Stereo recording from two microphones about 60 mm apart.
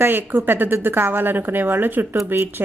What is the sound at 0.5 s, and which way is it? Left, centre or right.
Speech, right.